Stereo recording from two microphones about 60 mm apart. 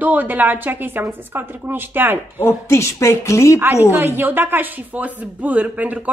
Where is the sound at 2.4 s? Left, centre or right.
Left.